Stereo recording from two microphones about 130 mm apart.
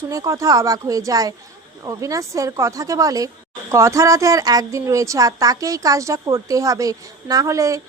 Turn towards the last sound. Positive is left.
turn(degrees=-25)  # may be behind; listen again after turning